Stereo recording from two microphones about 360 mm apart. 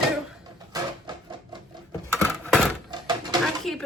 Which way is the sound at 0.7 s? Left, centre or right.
Centre.